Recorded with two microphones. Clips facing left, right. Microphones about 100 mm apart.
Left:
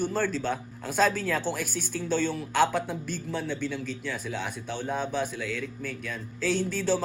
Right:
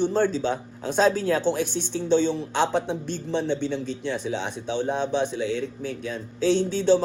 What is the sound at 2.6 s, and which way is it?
Speech, 25° right (ahead or behind).